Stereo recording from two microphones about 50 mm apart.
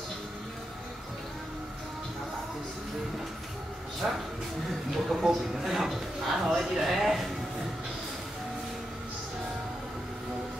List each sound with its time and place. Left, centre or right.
4.0 s a man's voice: centre